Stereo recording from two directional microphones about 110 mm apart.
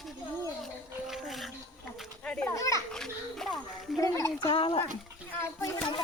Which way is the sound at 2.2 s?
10° left (ahead or behind).